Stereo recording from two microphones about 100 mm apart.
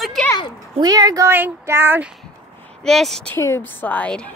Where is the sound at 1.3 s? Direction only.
20° right (ahead or behind).